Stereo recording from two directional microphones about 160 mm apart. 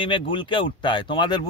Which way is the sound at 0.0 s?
30° left (ahead or behind).